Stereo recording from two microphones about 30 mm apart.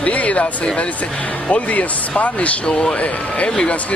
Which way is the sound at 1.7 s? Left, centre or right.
Left.